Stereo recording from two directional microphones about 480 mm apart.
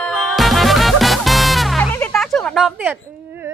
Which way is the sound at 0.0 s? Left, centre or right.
Centre.